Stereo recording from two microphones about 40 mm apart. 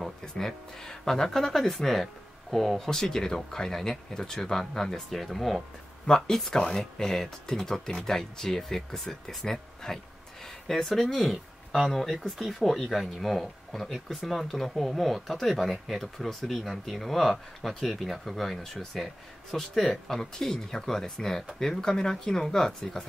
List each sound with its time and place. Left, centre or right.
0.0 s speech: centre
2.9 s speech: centre
6.0 s speech: centre
6.3 s speech: centre
12.4 s speech: centre
12.6 s speech: centre